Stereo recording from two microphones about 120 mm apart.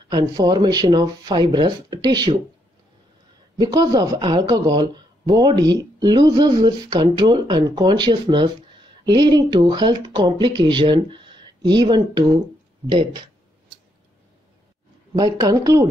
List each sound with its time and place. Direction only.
0.1 s speech: 35° right (ahead or behind)
3.5 s speech: 35° right (ahead or behind)
15.1 s speech: 30° right (ahead or behind)